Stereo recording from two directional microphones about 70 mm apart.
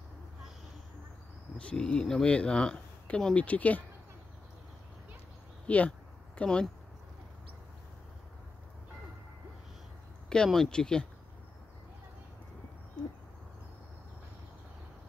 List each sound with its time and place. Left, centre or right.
1.6 s speech: centre
5.7 s a sound: left
10.3 s speech: centre